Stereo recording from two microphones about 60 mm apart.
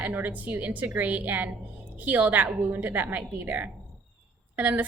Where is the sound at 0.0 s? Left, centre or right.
Right.